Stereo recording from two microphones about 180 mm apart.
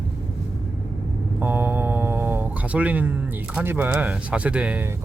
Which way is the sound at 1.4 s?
10° right (ahead or behind).